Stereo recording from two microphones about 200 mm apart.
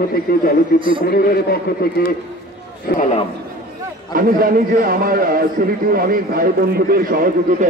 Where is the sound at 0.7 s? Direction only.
25° right (ahead or behind).